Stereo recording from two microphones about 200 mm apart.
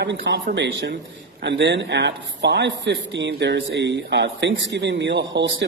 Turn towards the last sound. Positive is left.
turn(degrees=-60)  # may be behind; listen again after turning